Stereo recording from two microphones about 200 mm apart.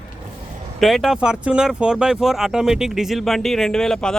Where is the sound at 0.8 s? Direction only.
Centre (ahead or behind).